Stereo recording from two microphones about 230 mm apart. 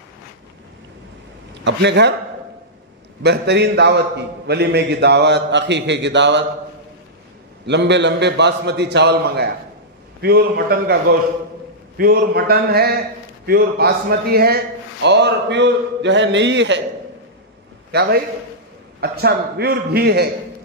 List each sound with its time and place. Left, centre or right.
1.6 s a man's voice: right
3.2 s a man's voice: right
7.6 s a man's voice: right
12.0 s a man's voice: right
18.9 s a man's voice: right